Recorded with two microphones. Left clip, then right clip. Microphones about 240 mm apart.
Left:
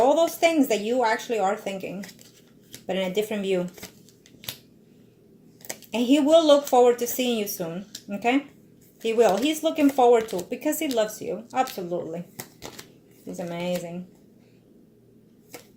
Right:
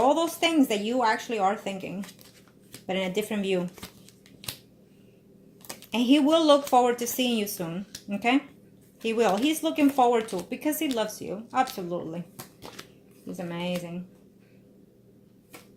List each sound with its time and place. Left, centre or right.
0.0 s speech: right
5.6 s speech: right
13.3 s speech: right